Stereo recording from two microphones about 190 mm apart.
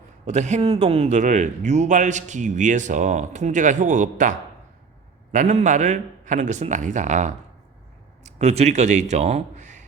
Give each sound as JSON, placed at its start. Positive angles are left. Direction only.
{"t": 0.3, "sound": "speech", "side_deg": -35}